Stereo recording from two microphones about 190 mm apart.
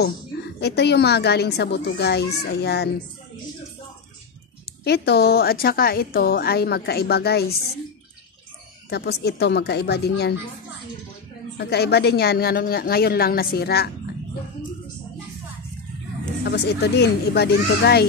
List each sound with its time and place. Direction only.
0.6 s a woman's voice: 60° left (ahead or behind)
4.8 s a woman's voice: 60° left (ahead or behind)
8.9 s a woman's voice: 60° left (ahead or behind)
11.5 s a woman's voice: 60° left (ahead or behind)
16.4 s a woman's voice: 60° left (ahead or behind)